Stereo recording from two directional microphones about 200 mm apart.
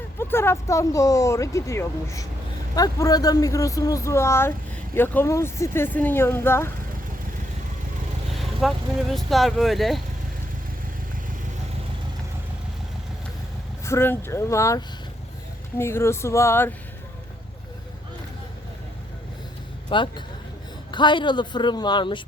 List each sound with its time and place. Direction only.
0.2 s speech: 10° left (ahead or behind)
8.4 s speech: centre (ahead or behind)
13.8 s speech: 10° left (ahead or behind)
19.9 s speech: 25° left (ahead or behind)